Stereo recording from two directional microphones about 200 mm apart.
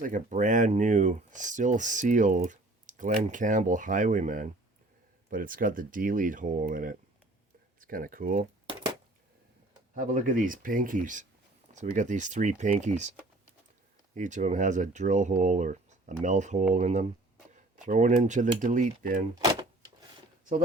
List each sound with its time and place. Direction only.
0.0 s speech: 40° right (ahead or behind)
9.9 s speech: 40° right (ahead or behind)